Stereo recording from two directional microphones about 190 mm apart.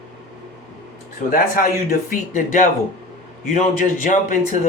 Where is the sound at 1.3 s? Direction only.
45° left (ahead or behind).